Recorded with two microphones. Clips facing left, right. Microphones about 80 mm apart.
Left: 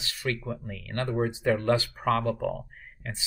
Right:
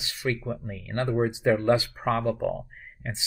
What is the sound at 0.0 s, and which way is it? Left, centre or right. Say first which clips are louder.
Speech: right 2 dB; centre.